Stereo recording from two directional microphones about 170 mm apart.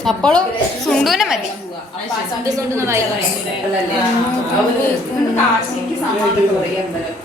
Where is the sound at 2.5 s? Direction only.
15° right (ahead or behind).